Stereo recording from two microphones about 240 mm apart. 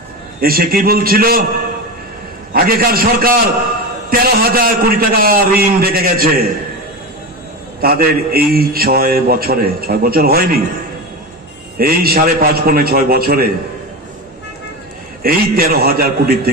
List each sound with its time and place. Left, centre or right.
0.4 s a man's voice: right
2.5 s a man's voice: right
7.8 s a man's voice: right
11.8 s a man's voice: right
15.2 s a man's voice: right